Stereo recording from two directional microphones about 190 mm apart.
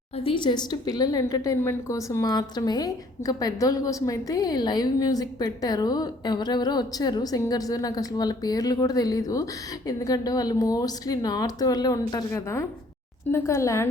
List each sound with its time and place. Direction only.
0.2 s a woman's voice: 25° left (ahead or behind)